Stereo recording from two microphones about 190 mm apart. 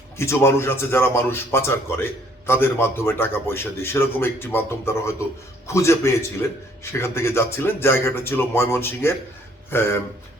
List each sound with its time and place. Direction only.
0.2 s a man's voice: 15° left (ahead or behind)